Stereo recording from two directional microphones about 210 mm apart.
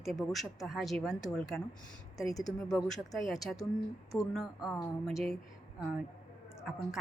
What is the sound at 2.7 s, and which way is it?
A woman's voice, centre (ahead or behind).